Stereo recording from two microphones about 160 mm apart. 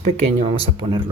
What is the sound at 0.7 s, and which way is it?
Speech, 30° right (ahead or behind).